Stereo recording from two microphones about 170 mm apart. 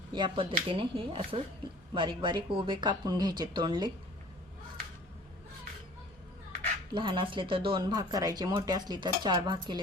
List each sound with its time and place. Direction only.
0.1 s speech: 30° right (ahead or behind)
6.9 s speech: 30° right (ahead or behind)